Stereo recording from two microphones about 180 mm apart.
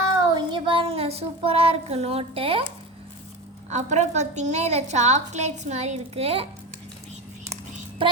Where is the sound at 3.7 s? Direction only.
40° right (ahead or behind).